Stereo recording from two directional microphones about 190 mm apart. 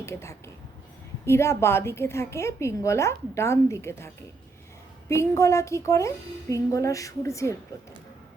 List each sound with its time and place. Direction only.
0.0 s a woman's voice: 15° left (ahead or behind)